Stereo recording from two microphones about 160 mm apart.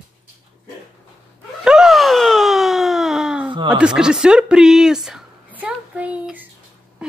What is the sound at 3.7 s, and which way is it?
Speech, 5° right (ahead or behind).